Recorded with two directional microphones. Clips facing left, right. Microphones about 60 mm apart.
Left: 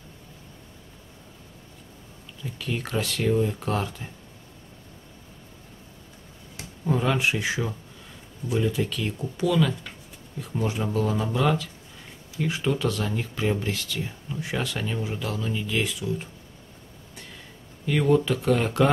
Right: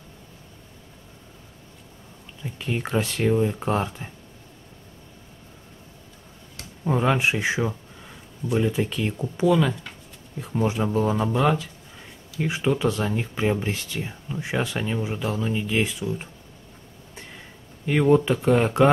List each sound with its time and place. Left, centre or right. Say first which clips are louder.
2.4 s speech: right 2 dB; right
6.8 s speech: right 2 dB; right
17.8 s speech: right 3 dB; right